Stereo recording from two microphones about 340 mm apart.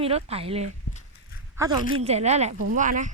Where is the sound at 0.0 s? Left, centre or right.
Centre.